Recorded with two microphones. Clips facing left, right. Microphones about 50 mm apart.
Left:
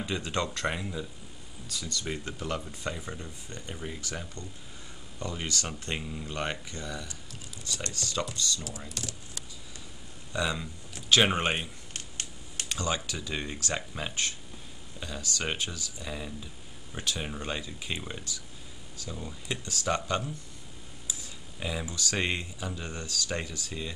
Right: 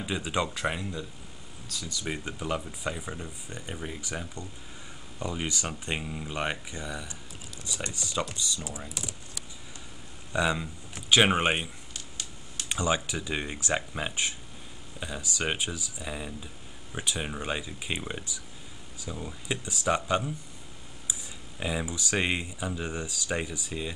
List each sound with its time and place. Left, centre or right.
0.0 s speech: centre
10.3 s speech: centre
11.9 s a sound: left
12.6 s speech: centre